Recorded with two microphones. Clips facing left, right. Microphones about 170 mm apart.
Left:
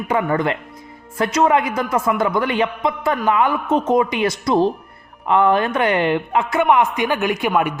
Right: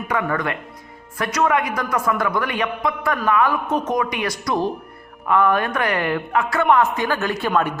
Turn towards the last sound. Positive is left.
turn(degrees=15)  # may be behind; listen again after turning